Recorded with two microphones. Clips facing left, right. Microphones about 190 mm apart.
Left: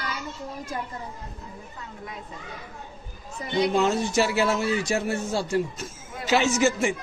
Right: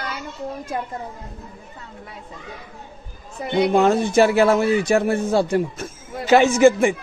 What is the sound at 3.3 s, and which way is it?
A man's voice, 60° right (ahead or behind).